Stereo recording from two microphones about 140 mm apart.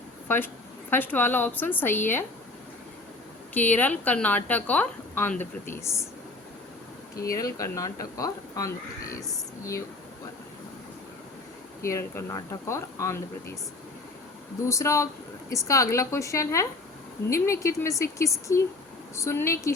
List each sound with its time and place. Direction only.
0.3 s a woman's voice: 15° left (ahead or behind)
3.5 s a woman's voice: 10° left (ahead or behind)
7.3 s speech: 25° left (ahead or behind)
11.8 s speech: 20° left (ahead or behind)
14.6 s speech: 20° left (ahead or behind)